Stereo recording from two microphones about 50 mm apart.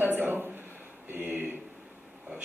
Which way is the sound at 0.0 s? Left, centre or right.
Right.